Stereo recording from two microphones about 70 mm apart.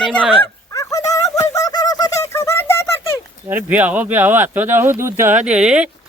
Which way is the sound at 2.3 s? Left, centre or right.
Left.